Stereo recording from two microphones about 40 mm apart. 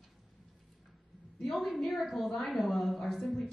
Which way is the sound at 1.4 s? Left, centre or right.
Centre.